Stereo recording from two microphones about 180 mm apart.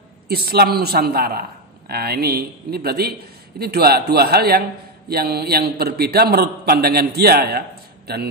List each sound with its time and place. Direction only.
0.3 s a man's voice: 60° right (ahead or behind)